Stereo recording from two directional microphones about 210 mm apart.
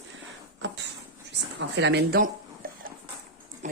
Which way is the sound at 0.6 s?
60° right (ahead or behind).